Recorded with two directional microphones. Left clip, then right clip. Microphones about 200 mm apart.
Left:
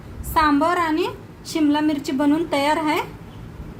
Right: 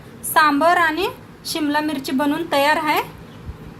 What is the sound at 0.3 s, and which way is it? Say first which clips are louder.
A woman's voice: right 3 dB; 30° right (ahead or behind).